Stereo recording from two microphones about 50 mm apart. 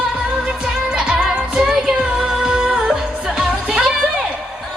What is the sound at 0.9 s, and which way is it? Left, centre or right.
Music, centre.